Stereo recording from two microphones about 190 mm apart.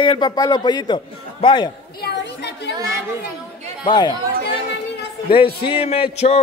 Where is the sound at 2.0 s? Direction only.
65° left (ahead or behind).